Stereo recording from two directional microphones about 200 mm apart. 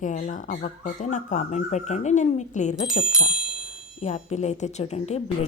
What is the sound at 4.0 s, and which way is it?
A woman's voice, 35° left (ahead or behind).